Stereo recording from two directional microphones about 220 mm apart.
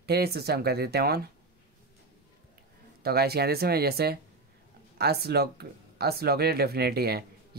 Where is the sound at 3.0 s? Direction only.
45° right (ahead or behind).